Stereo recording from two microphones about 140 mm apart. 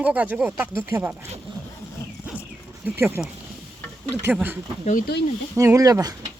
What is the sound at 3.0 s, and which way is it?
Speech, 15° right (ahead or behind).